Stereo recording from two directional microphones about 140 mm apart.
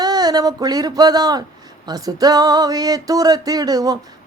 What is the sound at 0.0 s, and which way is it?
Speech, 30° right (ahead or behind).